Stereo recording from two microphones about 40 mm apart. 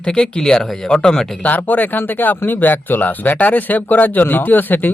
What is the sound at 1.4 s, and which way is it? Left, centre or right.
Speech, left.